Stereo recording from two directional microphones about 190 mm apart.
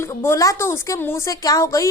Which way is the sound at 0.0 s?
15° left (ahead or behind).